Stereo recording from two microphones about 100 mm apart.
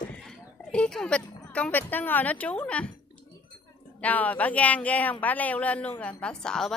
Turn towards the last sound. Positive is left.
turn(degrees=5)  # may be behind; listen again after turning